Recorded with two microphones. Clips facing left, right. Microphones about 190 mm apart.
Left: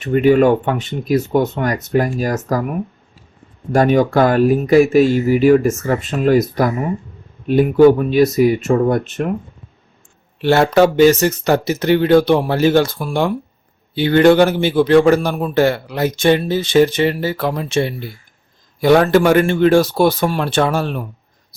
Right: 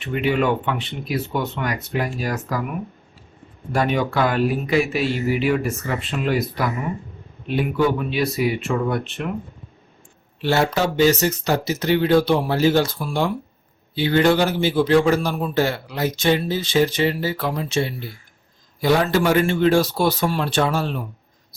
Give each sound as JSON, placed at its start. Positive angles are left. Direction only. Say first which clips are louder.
{"t": 0.0, "sound": "speech", "louder": "left 9 dB", "side_deg": 45}
{"t": 10.4, "sound": "a man's voice", "louder": "left 8 dB", "side_deg": 60}